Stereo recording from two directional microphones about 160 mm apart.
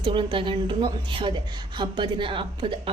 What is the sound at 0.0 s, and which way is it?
A woman's voice, 30° right (ahead or behind).